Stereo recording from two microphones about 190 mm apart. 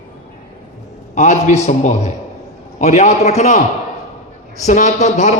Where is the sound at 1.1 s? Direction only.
40° left (ahead or behind).